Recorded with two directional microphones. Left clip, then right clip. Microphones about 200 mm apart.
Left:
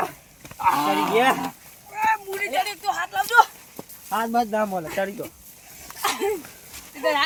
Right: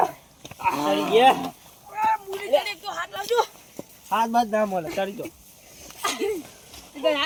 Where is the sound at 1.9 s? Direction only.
5° left (ahead or behind).